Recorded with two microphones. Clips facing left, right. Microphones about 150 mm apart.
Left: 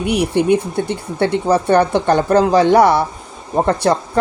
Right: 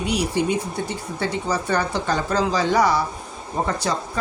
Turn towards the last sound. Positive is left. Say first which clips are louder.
# left 9 dB
turn(degrees=60)  # may be behind; listen again after turning